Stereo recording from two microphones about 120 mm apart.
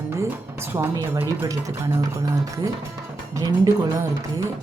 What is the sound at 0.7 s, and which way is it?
Speech, 30° right (ahead or behind).